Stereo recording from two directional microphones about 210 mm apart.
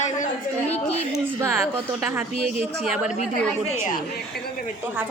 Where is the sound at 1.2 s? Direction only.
10° right (ahead or behind).